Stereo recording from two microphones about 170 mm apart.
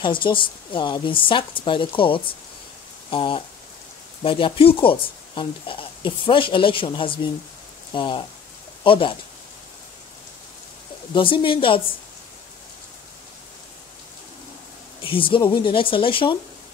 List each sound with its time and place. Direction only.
0.0 s speech: 30° left (ahead or behind)
11.1 s speech: 30° left (ahead or behind)
15.0 s speech: 30° left (ahead or behind)